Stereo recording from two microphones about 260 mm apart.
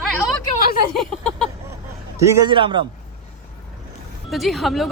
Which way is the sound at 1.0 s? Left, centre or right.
Centre.